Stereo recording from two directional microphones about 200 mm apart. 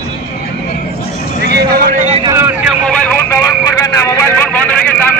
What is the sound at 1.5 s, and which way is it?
Vehicle, 50° right (ahead or behind).